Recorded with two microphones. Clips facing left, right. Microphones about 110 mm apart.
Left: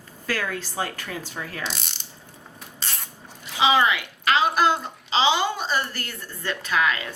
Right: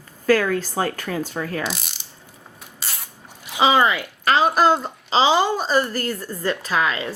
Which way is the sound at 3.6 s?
40° right (ahead or behind).